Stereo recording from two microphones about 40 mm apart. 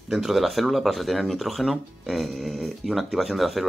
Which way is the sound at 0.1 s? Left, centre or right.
Centre.